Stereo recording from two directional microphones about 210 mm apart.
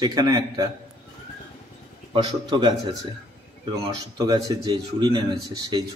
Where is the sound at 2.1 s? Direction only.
25° right (ahead or behind).